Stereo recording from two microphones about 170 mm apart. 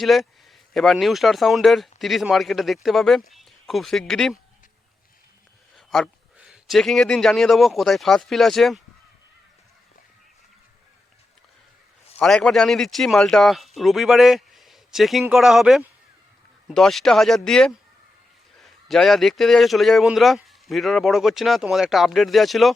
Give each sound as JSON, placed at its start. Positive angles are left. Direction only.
{"t": 0.0, "sound": "speech", "side_deg": 0}
{"t": 5.7, "sound": "a man's voice", "side_deg": 0}
{"t": 12.2, "sound": "speech", "side_deg": 5}